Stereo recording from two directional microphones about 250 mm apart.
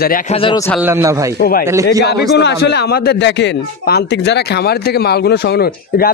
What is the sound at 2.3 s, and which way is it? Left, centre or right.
Speech, left.